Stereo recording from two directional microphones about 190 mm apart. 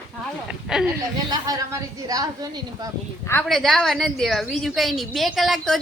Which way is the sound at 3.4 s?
Centre (ahead or behind).